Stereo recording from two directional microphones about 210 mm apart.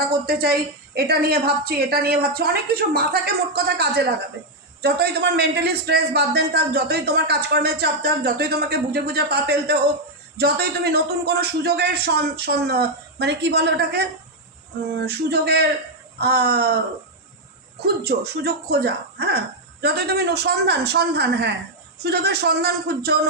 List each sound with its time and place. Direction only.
0.3 s a man's voice: 45° right (ahead or behind)
15.0 s a man's voice: 50° right (ahead or behind)
17.8 s a man's voice: 50° right (ahead or behind)